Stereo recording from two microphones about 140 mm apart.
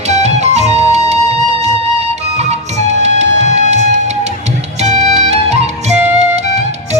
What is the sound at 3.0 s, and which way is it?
Music, 55° right (ahead or behind).